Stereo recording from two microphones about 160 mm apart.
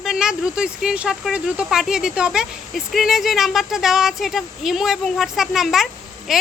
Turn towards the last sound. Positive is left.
turn(degrees=0)  # may be behind; listen again after turning